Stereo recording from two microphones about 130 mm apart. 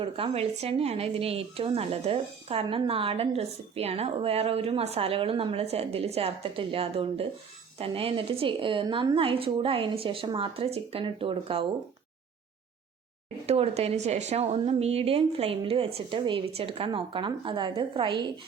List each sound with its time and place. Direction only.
0.0 s speech: 50° right (ahead or behind)
13.5 s speech: 55° right (ahead or behind)